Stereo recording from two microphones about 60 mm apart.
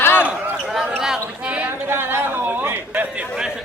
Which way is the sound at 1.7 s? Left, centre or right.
Right.